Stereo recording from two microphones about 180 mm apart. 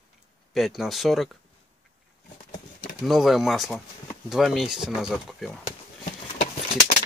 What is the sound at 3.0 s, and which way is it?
Speech, centre (ahead or behind).